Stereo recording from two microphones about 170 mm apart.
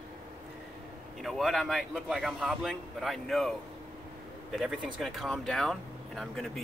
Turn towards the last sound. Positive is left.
turn(degrees=5)  # may be behind; listen again after turning